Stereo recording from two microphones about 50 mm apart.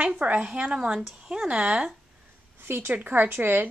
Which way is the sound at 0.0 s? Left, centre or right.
Right.